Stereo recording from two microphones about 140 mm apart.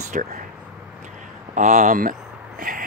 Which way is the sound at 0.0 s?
60° right (ahead or behind).